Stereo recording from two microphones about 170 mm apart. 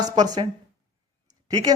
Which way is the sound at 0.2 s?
25° right (ahead or behind).